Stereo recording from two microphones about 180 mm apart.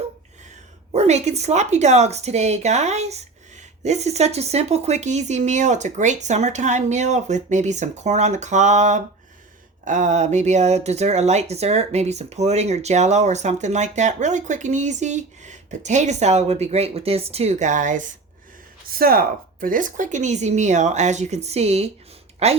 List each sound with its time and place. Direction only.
0.9 s speech: 40° right (ahead or behind)
18.9 s speech: 55° right (ahead or behind); by 22.6 s 35° right (ahead or behind)